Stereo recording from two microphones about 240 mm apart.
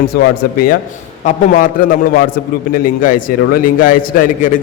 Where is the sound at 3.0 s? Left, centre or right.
Left.